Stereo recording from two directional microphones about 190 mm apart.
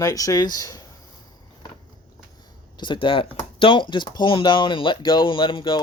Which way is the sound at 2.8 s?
25° left (ahead or behind).